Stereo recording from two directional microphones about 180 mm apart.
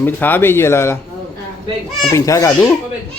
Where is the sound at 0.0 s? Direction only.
10° left (ahead or behind).